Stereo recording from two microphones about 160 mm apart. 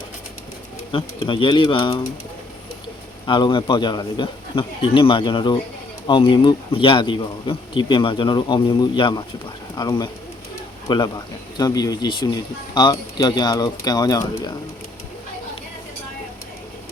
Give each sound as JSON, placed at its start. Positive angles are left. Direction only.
{"t": 0.9, "sound": "speech", "side_deg": 30}
{"t": 3.2, "sound": "speech", "side_deg": 30}